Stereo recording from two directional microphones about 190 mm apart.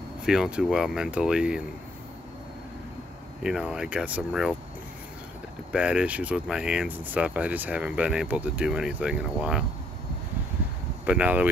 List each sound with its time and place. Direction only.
0.2 s speech: 5° right (ahead or behind)
3.4 s speech: 5° right (ahead or behind)
5.7 s speech: 5° right (ahead or behind)
11.1 s speech: 5° right (ahead or behind)